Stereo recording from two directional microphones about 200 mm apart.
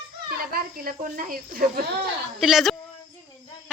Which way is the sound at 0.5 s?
45° right (ahead or behind).